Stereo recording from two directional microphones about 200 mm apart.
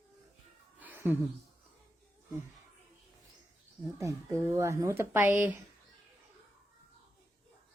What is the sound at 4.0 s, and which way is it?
Speech, 15° right (ahead or behind).